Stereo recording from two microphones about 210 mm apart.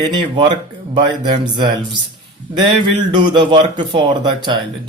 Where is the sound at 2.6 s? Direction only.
20° right (ahead or behind).